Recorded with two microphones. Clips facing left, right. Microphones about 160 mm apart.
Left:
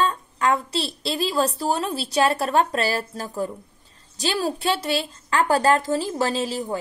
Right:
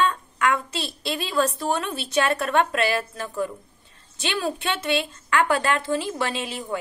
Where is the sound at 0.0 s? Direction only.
30° left (ahead or behind).